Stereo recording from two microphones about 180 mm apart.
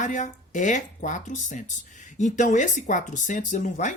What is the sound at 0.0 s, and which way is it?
Speech, 45° left (ahead or behind).